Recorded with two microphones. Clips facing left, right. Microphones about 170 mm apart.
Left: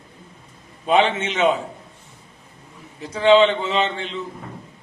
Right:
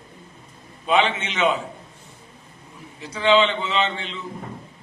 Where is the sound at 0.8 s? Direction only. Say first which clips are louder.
Left 3 dB; 45° left (ahead or behind).